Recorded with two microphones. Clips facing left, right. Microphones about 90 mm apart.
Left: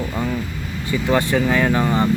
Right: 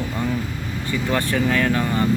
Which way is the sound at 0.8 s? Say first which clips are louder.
Left 4 dB; 20° left (ahead or behind).